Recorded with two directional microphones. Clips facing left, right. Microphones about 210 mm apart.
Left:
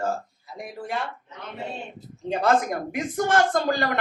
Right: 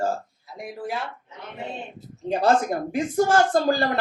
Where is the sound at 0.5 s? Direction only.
Centre (ahead or behind).